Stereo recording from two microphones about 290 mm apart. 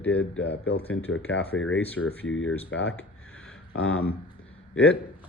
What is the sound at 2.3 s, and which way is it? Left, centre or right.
Speech, left.